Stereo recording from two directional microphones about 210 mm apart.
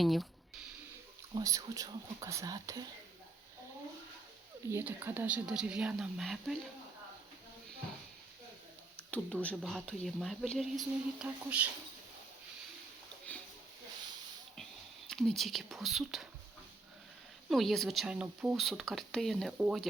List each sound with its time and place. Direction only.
0.0 s speech: centre (ahead or behind)
1.4 s speech: 15° right (ahead or behind)
4.7 s speech: 10° right (ahead or behind)
9.0 s speech: 5° left (ahead or behind)
15.1 s speech: centre (ahead or behind)
17.5 s speech: centre (ahead or behind)